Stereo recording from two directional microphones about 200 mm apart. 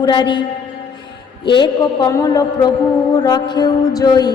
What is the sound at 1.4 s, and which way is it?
A woman's voice, 20° left (ahead or behind).